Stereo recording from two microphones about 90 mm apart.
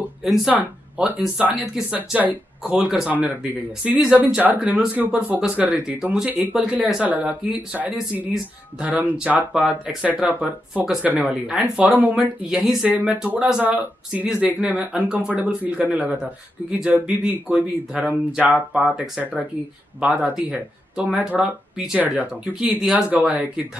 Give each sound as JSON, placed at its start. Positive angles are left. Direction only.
{"t": 0.5, "sound": "speech", "side_deg": -15}
{"t": 2.8, "sound": "speech", "side_deg": -5}
{"t": 3.1, "sound": "speech", "side_deg": -15}
{"t": 20.0, "sound": "speech", "side_deg": -15}